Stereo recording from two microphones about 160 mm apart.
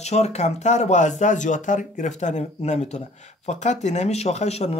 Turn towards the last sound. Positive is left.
turn(degrees=45)  # may be behind; listen again after turning